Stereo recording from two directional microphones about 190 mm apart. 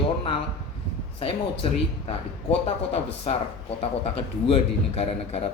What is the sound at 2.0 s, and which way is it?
A man's voice, 30° left (ahead or behind).